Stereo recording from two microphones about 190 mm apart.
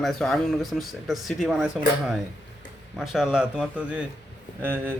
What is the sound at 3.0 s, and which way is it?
A man's voice, centre (ahead or behind).